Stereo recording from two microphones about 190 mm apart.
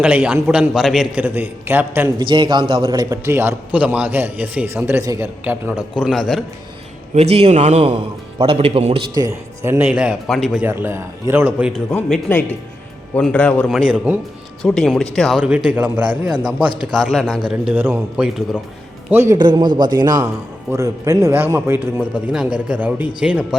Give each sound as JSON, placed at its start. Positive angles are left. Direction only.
{"t": 0.0, "sound": "a man's voice", "side_deg": -5}
{"t": 2.1, "sound": "a man's voice", "side_deg": -25}
{"t": 7.1, "sound": "a man's voice", "side_deg": -35}
{"t": 9.1, "sound": "speech", "side_deg": -15}
{"t": 10.7, "sound": "a man's voice", "side_deg": -10}
{"t": 14.6, "sound": "a man's voice", "side_deg": 5}